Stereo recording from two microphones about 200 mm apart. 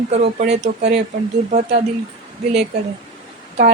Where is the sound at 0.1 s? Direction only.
30° right (ahead or behind).